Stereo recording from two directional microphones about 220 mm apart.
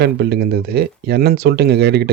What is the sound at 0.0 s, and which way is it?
Speech, 50° right (ahead or behind).